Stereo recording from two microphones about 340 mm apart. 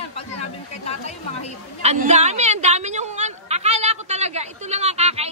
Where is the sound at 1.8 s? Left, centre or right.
Centre.